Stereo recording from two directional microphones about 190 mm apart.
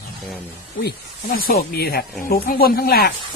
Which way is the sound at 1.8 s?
55° left (ahead or behind).